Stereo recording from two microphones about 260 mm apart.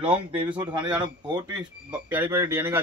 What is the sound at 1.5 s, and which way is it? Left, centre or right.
Speech, centre.